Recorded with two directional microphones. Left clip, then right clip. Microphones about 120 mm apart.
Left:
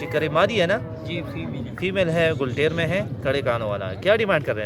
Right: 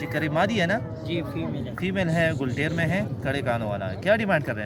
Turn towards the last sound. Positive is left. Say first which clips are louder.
# left 3 dB
turn(degrees=50)  # may be behind; listen again after turning